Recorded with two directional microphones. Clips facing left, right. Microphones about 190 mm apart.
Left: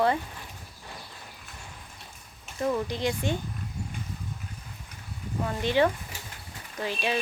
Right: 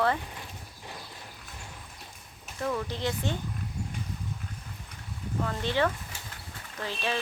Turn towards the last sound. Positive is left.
turn(degrees=15)  # may be behind; listen again after turning